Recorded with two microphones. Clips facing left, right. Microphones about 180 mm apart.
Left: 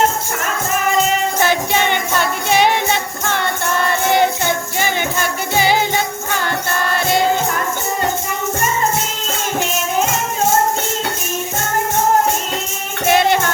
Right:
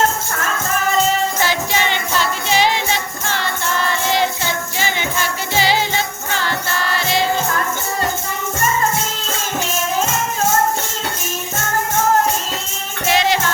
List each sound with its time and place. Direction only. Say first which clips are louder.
1.4 s jingle bell: left 3 dB; 55° left (ahead or behind)
4.1 s music: left 5 dB; 55° left (ahead or behind)
13.1 s music: left 3 dB; 55° left (ahead or behind)